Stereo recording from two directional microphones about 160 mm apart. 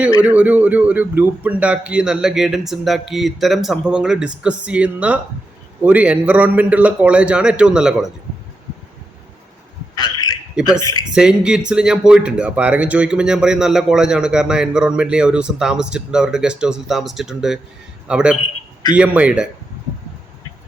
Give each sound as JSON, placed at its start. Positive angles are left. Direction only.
{"t": 0.2, "sound": "a man's voice", "side_deg": -10}
{"t": 10.0, "sound": "a sound", "side_deg": 25}
{"t": 11.1, "sound": "a man's voice", "side_deg": -5}